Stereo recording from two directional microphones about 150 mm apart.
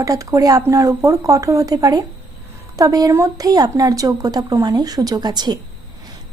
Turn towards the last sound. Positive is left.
turn(degrees=-30)  # may be behind; listen again after turning